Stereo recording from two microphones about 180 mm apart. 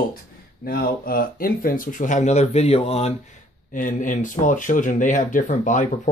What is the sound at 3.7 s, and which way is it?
Speech, 45° left (ahead or behind).